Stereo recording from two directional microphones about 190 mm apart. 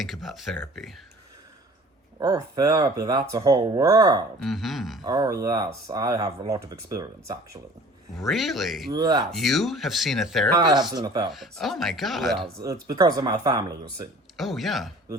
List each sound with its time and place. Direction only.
0.0 s speech: centre (ahead or behind)
2.1 s speech: 20° right (ahead or behind)
4.4 s speech: centre (ahead or behind)
5.0 s speech: 20° right (ahead or behind)
8.2 s speech: centre (ahead or behind)
8.9 s speech: 20° right (ahead or behind)
9.2 s speech: centre (ahead or behind)
10.6 s speech: 20° right (ahead or behind)
11.3 s speech: centre (ahead or behind)
12.6 s speech: 20° right (ahead or behind)
14.3 s speech: centre (ahead or behind)